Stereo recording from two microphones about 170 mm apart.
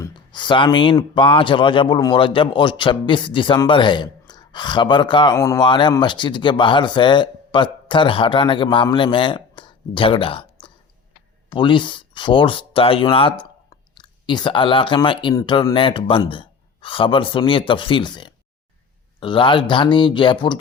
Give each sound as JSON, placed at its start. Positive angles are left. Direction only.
{"t": 0.0, "sound": "speech", "side_deg": 25}